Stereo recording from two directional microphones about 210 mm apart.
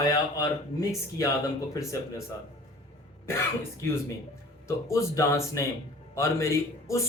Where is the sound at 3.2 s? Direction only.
10° left (ahead or behind).